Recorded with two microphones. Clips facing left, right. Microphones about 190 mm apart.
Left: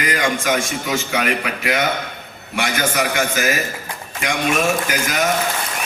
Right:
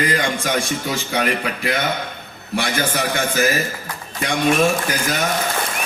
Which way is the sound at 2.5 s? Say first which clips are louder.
Left 1 dB; 35° right (ahead or behind).